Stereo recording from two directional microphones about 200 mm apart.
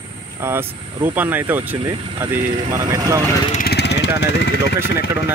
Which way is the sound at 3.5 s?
50° left (ahead or behind).